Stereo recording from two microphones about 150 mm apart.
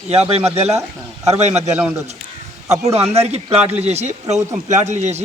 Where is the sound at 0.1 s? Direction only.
45° right (ahead or behind).